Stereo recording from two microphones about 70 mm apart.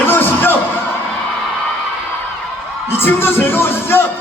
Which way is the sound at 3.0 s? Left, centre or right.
Left.